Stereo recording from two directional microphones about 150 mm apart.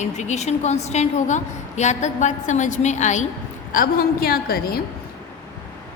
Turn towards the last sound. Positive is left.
turn(degrees=80)